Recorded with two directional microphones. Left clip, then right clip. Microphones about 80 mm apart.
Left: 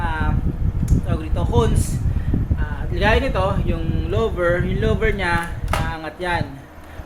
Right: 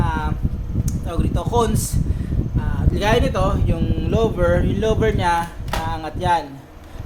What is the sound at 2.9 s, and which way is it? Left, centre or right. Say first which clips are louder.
Speech: even; right.